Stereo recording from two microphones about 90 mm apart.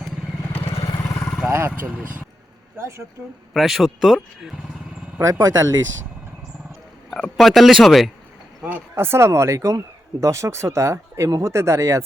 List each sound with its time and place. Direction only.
0.5 s vehicle: 90° left
0.9 s vehicle: 40° left (ahead or behind)
1.9 s speech: 10° right (ahead or behind)
3.5 s speech: centre (ahead or behind)
5.2 s speech: 45° right (ahead or behind)
7.1 s speech: 5° left (ahead or behind)
8.7 s speech: 25° right (ahead or behind)